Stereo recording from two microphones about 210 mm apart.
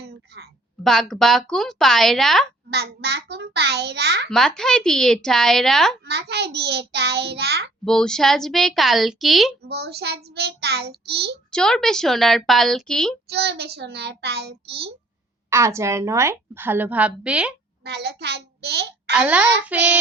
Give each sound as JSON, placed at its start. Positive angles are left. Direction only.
{"t": 0.0, "sound": "a sound", "side_deg": -50}
{"t": 0.9, "sound": "a woman's voice", "side_deg": 0}
{"t": 2.6, "sound": "child singing", "side_deg": -50}
{"t": 4.3, "sound": "a woman's voice", "side_deg": 0}
{"t": 6.1, "sound": "child singing", "side_deg": -50}
{"t": 7.9, "sound": "a woman's voice", "side_deg": 5}
{"t": 9.6, "sound": "child singing", "side_deg": -50}
{"t": 11.5, "sound": "a woman's voice", "side_deg": 5}
{"t": 13.3, "sound": "child singing", "side_deg": -50}
{"t": 15.4, "sound": "a woman's voice", "side_deg": -15}
{"t": 17.8, "sound": "a child's voice", "side_deg": -50}
{"t": 19.1, "sound": "a woman's voice", "side_deg": -5}